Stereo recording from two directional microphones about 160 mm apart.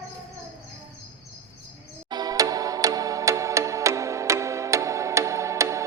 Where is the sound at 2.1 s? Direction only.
25° right (ahead or behind).